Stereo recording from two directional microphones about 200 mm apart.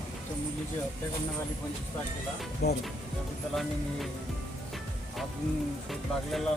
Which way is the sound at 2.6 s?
55° left (ahead or behind).